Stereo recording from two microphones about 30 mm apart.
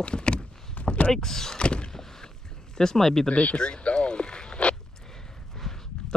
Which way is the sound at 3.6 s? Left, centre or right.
Left.